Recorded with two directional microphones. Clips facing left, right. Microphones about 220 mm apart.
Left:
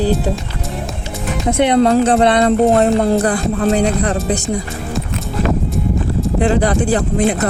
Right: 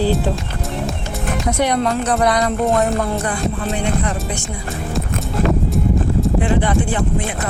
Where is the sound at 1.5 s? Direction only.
25° left (ahead or behind).